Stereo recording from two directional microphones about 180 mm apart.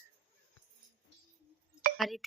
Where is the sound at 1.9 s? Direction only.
Centre (ahead or behind).